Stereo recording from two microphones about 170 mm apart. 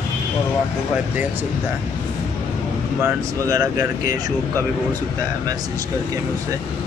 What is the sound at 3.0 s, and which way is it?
Speech, 20° right (ahead or behind).